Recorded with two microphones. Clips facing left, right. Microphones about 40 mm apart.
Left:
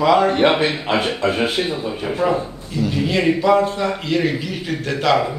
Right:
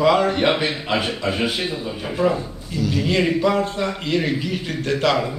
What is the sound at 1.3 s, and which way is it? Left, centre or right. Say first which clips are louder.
Speech: left 3 dB; left.